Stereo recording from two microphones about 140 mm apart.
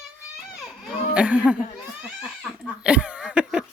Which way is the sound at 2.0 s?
5° right (ahead or behind).